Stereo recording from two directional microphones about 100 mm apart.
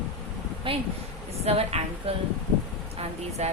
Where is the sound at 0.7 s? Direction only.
65° right (ahead or behind).